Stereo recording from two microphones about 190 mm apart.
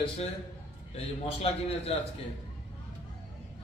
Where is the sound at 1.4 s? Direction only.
30° left (ahead or behind).